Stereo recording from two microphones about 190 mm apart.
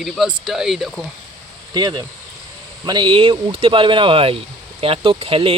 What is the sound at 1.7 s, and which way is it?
Speech, 20° right (ahead or behind).